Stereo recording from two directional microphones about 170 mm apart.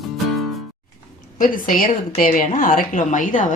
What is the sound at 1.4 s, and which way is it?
A woman's voice, 55° left (ahead or behind).